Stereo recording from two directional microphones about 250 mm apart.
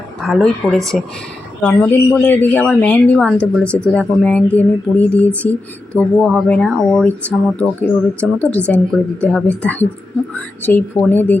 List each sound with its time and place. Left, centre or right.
0.2 s a woman's voice: centre